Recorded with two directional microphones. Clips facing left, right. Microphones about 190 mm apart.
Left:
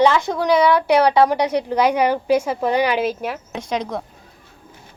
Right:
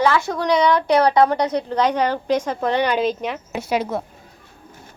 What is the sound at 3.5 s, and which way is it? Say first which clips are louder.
Speech: right 4 dB; 5° right (ahead or behind).